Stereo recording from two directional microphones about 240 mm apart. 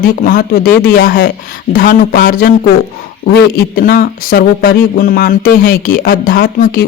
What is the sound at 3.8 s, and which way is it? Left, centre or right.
Speech, left.